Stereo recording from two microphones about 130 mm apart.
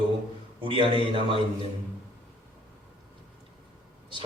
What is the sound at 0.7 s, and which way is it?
Speech, 40° right (ahead or behind).